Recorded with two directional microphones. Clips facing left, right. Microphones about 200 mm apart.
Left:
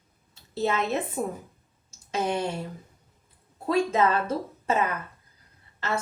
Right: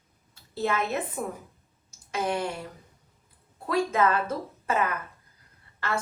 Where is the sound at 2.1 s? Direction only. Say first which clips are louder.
Left 1 dB; 25° left (ahead or behind).